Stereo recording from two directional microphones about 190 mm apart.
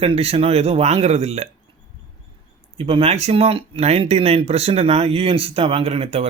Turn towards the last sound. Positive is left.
turn(degrees=-30)  # may be behind; listen again after turning